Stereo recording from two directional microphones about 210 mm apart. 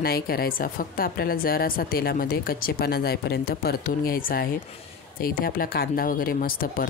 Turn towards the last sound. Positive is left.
turn(degrees=45)  # may be behind; listen again after turning